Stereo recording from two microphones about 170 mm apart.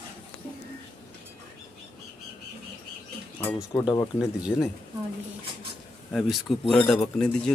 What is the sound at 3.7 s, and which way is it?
Speech, 20° left (ahead or behind).